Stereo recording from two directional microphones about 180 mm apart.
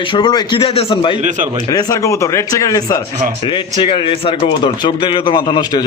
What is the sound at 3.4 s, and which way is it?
A man's voice, 30° left (ahead or behind).